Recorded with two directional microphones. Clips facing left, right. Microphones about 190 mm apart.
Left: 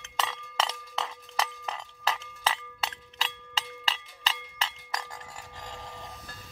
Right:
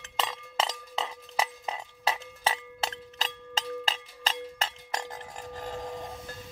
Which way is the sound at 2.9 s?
40° right (ahead or behind).